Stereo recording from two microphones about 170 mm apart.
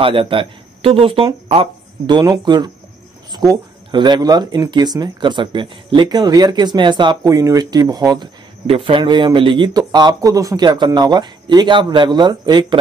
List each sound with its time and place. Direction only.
0.0 s speech: 30° right (ahead or behind)